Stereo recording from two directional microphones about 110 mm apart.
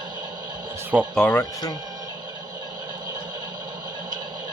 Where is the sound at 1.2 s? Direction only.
15° left (ahead or behind).